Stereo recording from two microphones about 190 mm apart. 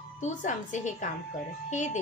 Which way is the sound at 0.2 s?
40° left (ahead or behind).